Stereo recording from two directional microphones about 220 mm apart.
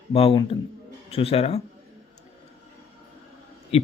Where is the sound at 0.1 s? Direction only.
25° left (ahead or behind).